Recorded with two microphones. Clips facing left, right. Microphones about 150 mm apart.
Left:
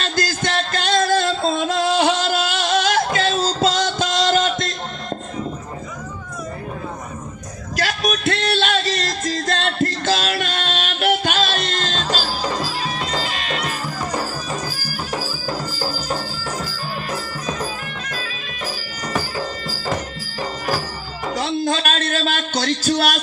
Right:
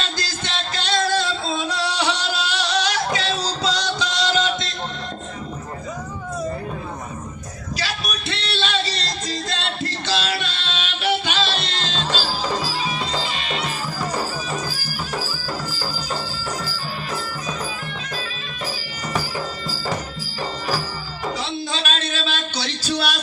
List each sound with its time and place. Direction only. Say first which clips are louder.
0.0 s music: left 7 dB; 50° left (ahead or behind)
7.8 s music: left 8 dB; 50° left (ahead or behind)
13.1 s music: left 1 dB; centre (ahead or behind)
13.3 s music: left 2 dB; 45° left (ahead or behind)
15.1 s music: left 3 dB; 15° left (ahead or behind)
21.3 s a sound: left 10 dB; 50° left (ahead or behind)